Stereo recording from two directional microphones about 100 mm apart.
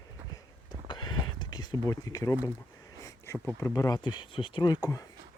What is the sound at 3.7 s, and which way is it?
Speech, 40° left (ahead or behind).